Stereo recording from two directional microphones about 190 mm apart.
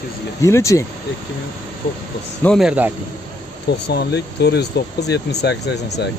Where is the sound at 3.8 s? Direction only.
60° left (ahead or behind).